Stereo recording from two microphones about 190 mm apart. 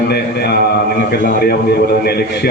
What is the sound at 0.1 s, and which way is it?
A man's voice, 60° left (ahead or behind).